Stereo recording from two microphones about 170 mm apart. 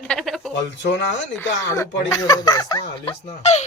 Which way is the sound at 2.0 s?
20° left (ahead or behind).